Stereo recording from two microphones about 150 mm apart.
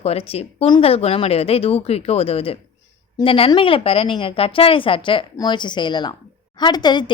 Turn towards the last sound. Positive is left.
turn(degrees=30)  # may be behind; listen again after turning